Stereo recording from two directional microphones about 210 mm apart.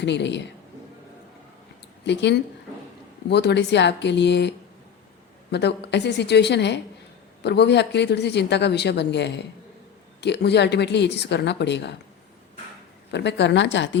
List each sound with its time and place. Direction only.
0.0 s speech: 55° left (ahead or behind)
2.0 s a woman's voice: 55° left (ahead or behind)
13.1 s speech: 55° left (ahead or behind)